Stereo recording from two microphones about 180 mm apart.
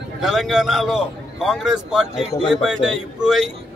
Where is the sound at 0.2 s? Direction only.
5° right (ahead or behind).